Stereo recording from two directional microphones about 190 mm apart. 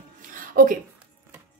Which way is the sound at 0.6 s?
45° right (ahead or behind).